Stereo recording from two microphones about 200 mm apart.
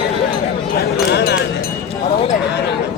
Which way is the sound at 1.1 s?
55° left (ahead or behind).